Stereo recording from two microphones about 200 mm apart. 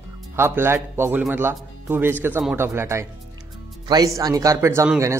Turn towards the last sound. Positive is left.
turn(degrees=-15)  # may be behind; listen again after turning